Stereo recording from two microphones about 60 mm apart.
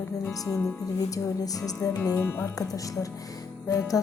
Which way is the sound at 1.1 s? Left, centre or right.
Left.